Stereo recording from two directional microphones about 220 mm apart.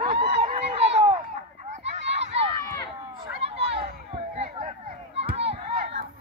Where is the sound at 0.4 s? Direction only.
25° right (ahead or behind).